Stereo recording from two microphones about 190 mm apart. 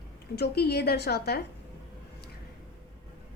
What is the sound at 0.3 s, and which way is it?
A woman's voice, 60° left (ahead or behind).